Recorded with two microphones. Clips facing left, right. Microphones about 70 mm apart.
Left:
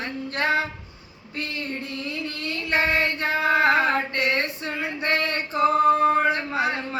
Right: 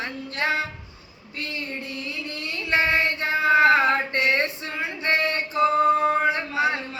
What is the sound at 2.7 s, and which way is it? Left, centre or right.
Female singing, left.